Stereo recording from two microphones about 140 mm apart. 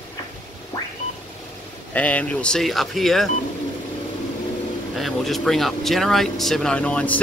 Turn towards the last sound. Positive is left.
turn(degrees=10)  # may be behind; listen again after turning